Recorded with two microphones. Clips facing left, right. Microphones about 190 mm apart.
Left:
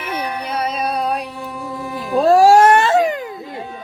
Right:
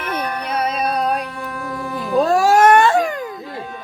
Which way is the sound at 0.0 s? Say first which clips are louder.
Even; 10° left (ahead or behind).